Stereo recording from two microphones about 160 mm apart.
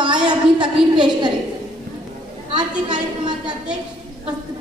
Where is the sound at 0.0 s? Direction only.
30° right (ahead or behind).